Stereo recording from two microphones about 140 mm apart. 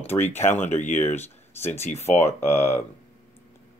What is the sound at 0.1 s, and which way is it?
Speech, 20° left (ahead or behind).